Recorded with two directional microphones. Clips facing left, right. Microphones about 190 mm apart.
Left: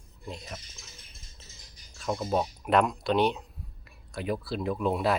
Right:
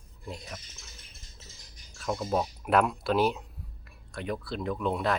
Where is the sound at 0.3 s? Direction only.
Centre (ahead or behind).